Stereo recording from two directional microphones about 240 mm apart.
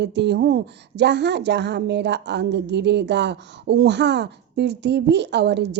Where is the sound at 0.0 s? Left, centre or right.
Right.